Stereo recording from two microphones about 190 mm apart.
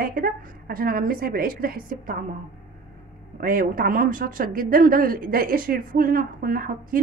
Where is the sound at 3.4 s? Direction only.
45° right (ahead or behind).